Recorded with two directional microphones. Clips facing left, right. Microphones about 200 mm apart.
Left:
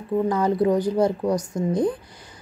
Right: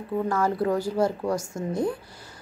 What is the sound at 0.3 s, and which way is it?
A woman's voice, 20° left (ahead or behind).